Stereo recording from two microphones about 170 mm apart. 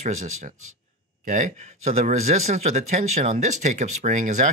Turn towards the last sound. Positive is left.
turn(degrees=-45)  # may be behind; listen again after turning